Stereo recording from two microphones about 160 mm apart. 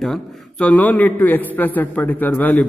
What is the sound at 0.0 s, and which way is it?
A man's voice, centre (ahead or behind).